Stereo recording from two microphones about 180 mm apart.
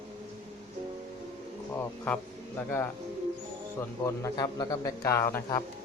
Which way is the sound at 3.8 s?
15° left (ahead or behind).